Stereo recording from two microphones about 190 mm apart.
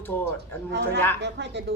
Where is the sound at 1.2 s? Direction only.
65° right (ahead or behind).